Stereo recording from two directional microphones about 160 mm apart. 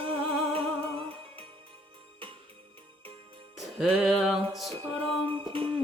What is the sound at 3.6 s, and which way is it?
Music, centre (ahead or behind).